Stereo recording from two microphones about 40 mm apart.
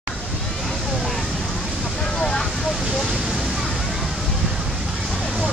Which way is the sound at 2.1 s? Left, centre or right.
Centre.